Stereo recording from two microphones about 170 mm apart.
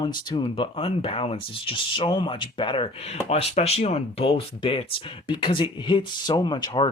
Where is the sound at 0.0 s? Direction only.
25° left (ahead or behind).